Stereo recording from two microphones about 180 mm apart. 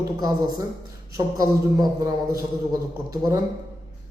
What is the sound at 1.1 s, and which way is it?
A man's voice, 20° right (ahead or behind).